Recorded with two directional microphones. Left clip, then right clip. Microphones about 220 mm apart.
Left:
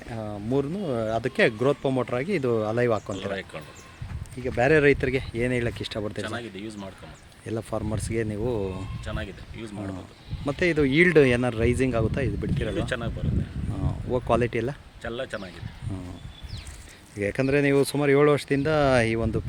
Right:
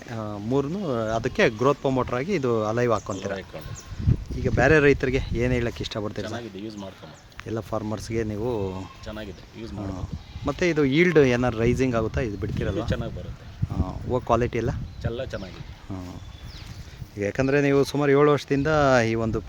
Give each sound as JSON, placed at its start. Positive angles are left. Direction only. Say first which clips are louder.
{"t": 0.1, "sound": "speech", "louder": "right 1 dB", "side_deg": 0}
{"t": 7.4, "sound": "speech", "louder": "right 1 dB", "side_deg": 5}
{"t": 9.0, "sound": "speech", "louder": "left 5 dB", "side_deg": -15}
{"t": 10.4, "sound": "speech", "louder": "right 1 dB", "side_deg": 5}
{"t": 12.7, "sound": "speech", "louder": "even", "side_deg": -15}
{"t": 13.8, "sound": "speech", "louder": "right 1 dB", "side_deg": 0}
{"t": 15.0, "sound": "speech", "louder": "even", "side_deg": -20}
{"t": 17.2, "sound": "speech", "louder": "right 1 dB", "side_deg": 5}